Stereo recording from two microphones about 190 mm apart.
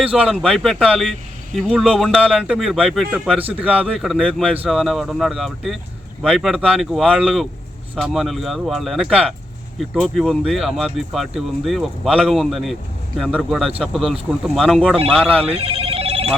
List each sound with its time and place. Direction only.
0.0 s speech: 5° right (ahead or behind)
15.5 s telephone bell ringing: 30° right (ahead or behind)